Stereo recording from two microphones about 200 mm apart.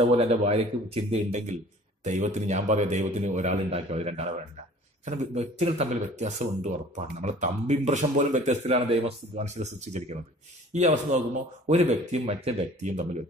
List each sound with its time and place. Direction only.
0.2 s a man's voice: 30° right (ahead or behind)